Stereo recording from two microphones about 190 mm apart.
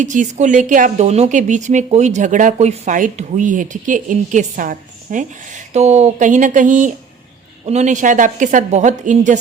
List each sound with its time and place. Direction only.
0.0 s speech: 40° right (ahead or behind)